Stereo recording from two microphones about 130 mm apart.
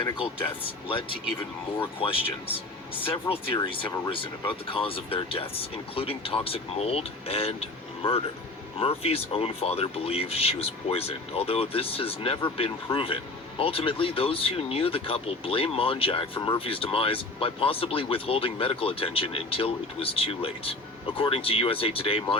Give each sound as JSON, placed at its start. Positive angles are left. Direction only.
{"t": 0.0, "sound": "speech", "side_deg": 45}